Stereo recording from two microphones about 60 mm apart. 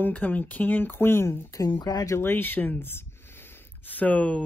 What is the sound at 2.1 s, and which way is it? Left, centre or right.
Speech, left.